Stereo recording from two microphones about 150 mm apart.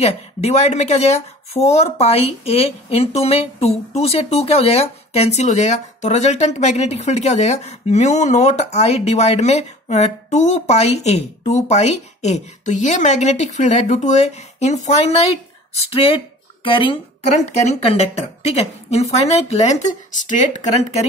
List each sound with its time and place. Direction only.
0.0 s speech: 45° left (ahead or behind)
17.3 s speech: 50° left (ahead or behind)